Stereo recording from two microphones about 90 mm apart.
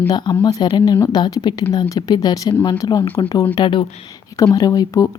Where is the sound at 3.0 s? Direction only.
80° left.